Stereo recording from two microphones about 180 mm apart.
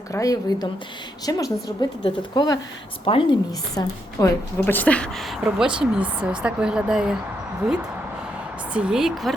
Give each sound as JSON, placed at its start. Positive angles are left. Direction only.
{"t": 0.1, "sound": "a woman's voice", "side_deg": 20}
{"t": 3.8, "sound": "speech", "side_deg": 20}
{"t": 4.6, "sound": "a woman's voice", "side_deg": 10}